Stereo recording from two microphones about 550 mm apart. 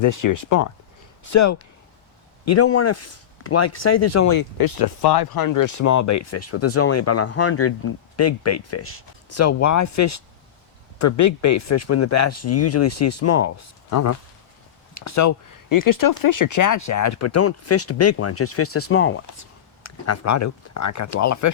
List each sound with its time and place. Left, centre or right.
0.0 s speech: left